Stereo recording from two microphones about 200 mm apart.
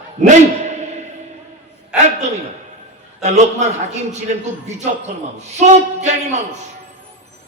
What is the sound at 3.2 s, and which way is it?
A man's voice, 35° right (ahead or behind).